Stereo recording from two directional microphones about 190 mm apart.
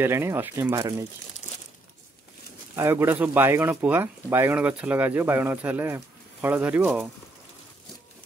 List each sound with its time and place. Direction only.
0.0 s speech: 10° right (ahead or behind)
2.7 s speech: 10° right (ahead or behind)